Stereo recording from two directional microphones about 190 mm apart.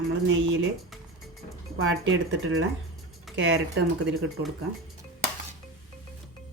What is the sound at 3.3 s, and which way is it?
Speech, 75° right (ahead or behind).